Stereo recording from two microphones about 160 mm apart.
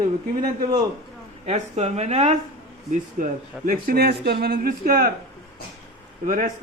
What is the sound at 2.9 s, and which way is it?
A man's voice, 55° right (ahead or behind).